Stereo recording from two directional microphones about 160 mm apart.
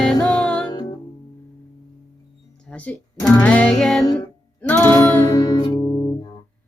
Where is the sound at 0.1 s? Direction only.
5° left (ahead or behind).